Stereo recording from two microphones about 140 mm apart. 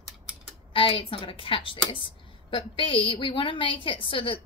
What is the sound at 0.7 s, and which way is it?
A woman's voice, 40° left (ahead or behind).